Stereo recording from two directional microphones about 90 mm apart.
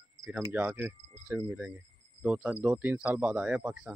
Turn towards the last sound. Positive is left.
turn(degrees=-10)  # may be behind; listen again after turning